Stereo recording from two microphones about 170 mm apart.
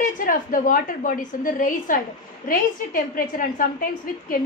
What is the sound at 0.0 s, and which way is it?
A woman's voice, 55° left (ahead or behind).